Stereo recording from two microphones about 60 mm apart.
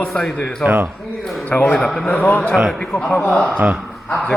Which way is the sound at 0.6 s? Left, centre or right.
Right.